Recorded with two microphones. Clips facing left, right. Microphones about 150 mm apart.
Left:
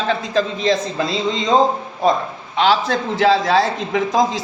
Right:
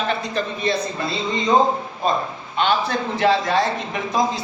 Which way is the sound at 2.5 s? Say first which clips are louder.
Left 4 dB; 90° left.